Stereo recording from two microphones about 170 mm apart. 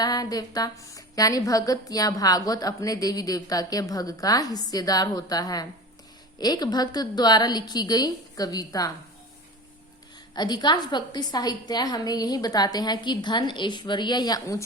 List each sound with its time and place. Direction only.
0.0 s a woman's voice: 20° left (ahead or behind)
10.3 s a woman's voice: 25° left (ahead or behind)